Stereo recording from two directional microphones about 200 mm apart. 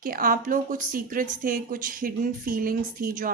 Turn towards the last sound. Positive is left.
turn(degrees=-45)  # may be behind; listen again after turning